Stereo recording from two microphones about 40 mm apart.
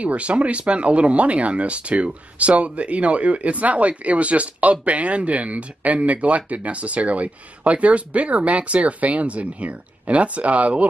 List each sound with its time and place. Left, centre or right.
0.0 s speech: right